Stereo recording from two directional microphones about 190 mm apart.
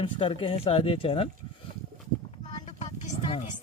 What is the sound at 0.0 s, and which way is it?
Speech, 25° left (ahead or behind).